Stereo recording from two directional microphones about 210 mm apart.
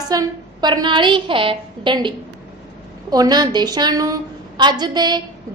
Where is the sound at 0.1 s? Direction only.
20° right (ahead or behind).